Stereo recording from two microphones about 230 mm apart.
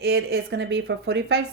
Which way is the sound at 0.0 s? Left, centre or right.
Right.